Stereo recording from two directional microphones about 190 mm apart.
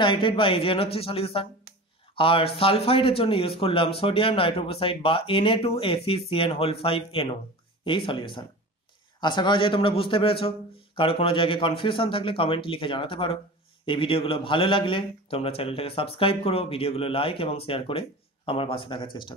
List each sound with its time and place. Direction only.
0.0 s a man's voice: 25° left (ahead or behind)